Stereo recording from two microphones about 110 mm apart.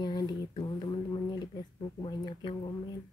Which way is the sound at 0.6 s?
50° left (ahead or behind).